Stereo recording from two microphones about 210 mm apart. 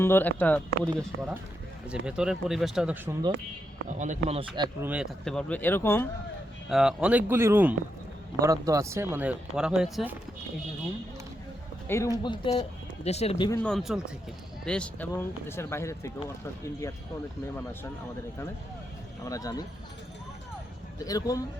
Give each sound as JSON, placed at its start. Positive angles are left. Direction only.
{"t": 0.0, "sound": "speech", "side_deg": 10}
{"t": 1.9, "sound": "speech", "side_deg": -5}
{"t": 3.8, "sound": "speech", "side_deg": -35}
{"t": 4.9, "sound": "speech", "side_deg": 0}
{"t": 6.7, "sound": "speech", "side_deg": 0}
{"t": 11.9, "sound": "speech", "side_deg": 15}
{"t": 13.6, "sound": "speech", "side_deg": 0}
{"t": 19.2, "sound": "speech", "side_deg": 15}
{"t": 21.0, "sound": "speech", "side_deg": 15}